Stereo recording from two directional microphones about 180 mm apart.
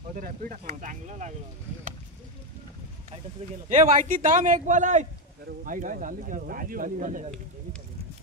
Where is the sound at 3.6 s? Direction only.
45° right (ahead or behind).